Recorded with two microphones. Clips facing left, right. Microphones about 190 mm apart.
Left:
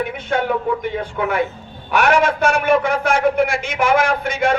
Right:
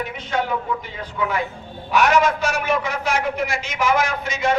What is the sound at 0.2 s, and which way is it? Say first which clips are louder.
A man's voice: left 2 dB; 60° left (ahead or behind).